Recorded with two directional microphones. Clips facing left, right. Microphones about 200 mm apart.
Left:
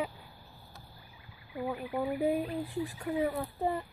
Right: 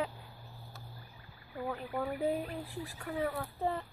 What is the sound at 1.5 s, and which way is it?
Speech, 15° left (ahead or behind).